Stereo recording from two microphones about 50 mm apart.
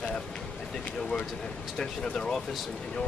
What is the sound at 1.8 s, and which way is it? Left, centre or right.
Speech, centre.